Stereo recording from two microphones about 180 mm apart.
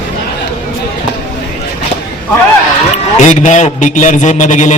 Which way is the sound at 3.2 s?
40° left (ahead or behind).